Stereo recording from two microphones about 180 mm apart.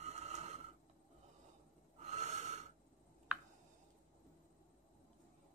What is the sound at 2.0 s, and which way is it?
Snort, 40° right (ahead or behind).